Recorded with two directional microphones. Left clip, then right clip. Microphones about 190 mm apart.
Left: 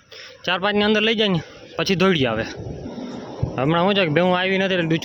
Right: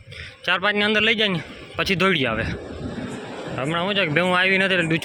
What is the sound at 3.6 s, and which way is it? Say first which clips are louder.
A man's voice: left 4 dB; 35° left (ahead or behind).